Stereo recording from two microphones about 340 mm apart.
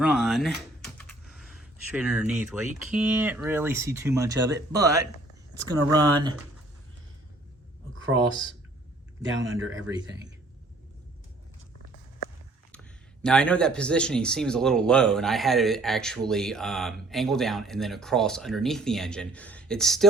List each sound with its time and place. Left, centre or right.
0.0 s speech: centre
0.9 s a sound: centre
2.8 s speech: centre
7.9 s a sound: right
9.3 s speech: right
13.2 s speech: centre